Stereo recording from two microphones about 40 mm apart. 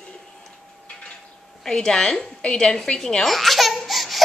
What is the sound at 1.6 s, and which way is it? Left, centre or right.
Speech, centre.